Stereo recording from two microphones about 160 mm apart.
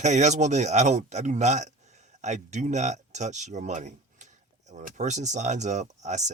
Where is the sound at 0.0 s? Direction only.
45° right (ahead or behind).